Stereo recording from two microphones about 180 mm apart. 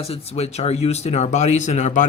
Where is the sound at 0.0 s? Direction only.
35° left (ahead or behind).